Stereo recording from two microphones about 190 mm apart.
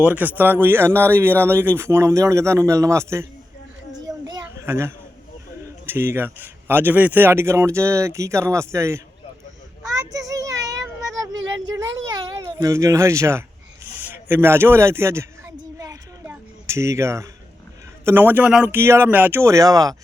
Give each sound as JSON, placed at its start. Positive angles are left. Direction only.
{"t": 0.0, "sound": "speech", "side_deg": -10}
{"t": 3.9, "sound": "children playing", "side_deg": -20}
{"t": 5.8, "sound": "speech", "side_deg": -10}
{"t": 10.1, "sound": "child singing", "side_deg": -20}
{"t": 12.4, "sound": "speech", "side_deg": -15}
{"t": 14.1, "sound": "a sound", "side_deg": -10}
{"t": 18.0, "sound": "speech", "side_deg": -10}